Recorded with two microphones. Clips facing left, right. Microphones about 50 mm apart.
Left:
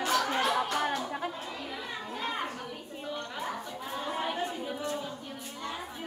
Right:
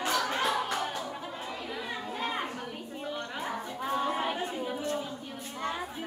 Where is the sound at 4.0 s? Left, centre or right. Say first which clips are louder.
Left 1 dB; centre.